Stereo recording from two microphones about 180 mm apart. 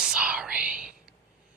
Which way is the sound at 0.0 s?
5° right (ahead or behind).